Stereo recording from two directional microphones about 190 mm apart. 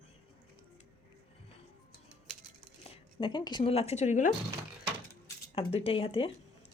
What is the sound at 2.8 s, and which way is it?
Speech, 30° left (ahead or behind).